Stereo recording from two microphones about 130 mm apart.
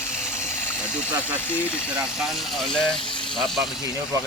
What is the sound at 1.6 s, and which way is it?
Speech, 10° right (ahead or behind).